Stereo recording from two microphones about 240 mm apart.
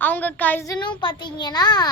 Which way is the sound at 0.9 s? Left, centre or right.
Centre.